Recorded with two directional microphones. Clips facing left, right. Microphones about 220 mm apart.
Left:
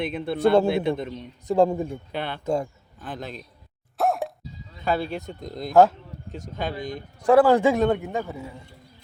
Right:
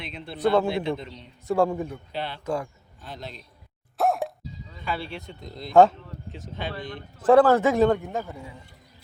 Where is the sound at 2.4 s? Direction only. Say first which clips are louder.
Left 4 dB; 25° left (ahead or behind).